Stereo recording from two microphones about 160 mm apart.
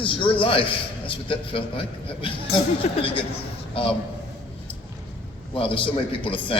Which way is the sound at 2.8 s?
35° left (ahead or behind).